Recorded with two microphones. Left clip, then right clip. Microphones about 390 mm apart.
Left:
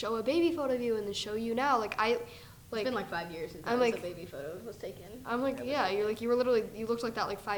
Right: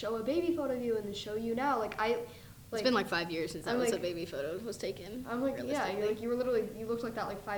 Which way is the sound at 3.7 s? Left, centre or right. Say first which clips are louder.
Left 4 dB; left.